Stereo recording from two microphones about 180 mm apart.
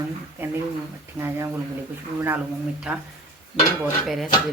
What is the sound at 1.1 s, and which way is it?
Speech, 15° right (ahead or behind).